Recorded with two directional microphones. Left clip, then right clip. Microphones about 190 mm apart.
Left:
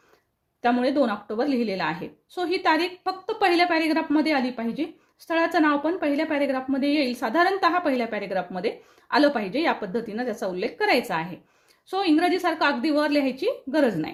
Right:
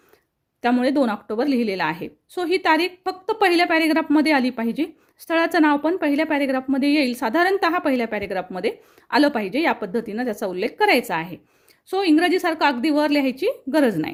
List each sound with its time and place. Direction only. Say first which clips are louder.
0.6 s a woman's voice: right 2 dB; 45° right (ahead or behind)